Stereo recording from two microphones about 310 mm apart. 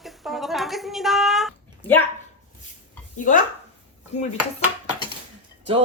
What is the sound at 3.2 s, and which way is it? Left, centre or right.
Speech, left.